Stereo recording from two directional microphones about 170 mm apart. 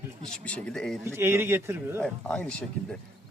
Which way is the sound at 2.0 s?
5° left (ahead or behind).